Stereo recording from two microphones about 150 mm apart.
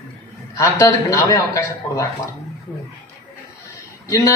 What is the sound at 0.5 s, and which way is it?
A man's voice, 20° left (ahead or behind).